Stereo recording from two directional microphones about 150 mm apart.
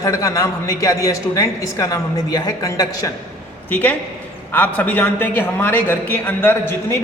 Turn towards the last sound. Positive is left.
turn(degrees=15)  # may be behind; listen again after turning